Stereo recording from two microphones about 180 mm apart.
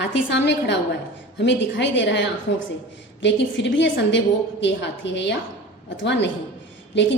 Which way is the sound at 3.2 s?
80° left.